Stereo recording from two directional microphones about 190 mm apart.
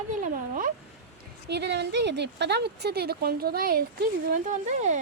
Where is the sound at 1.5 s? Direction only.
60° right (ahead or behind).